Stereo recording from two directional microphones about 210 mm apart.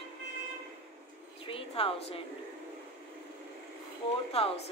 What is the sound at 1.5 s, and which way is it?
Speech, 25° left (ahead or behind).